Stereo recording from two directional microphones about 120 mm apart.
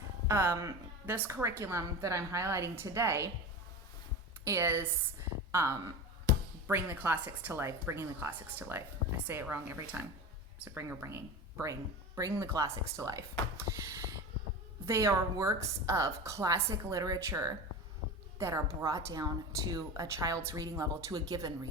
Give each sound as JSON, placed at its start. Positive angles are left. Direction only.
{"t": 0.3, "sound": "a woman's voice", "side_deg": -20}
{"t": 4.4, "sound": "a woman's voice", "side_deg": -20}
{"t": 13.6, "sound": "a sound", "side_deg": -25}
{"t": 14.8, "sound": "a woman's voice", "side_deg": -25}